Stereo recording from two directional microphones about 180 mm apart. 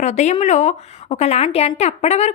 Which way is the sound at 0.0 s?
40° left (ahead or behind).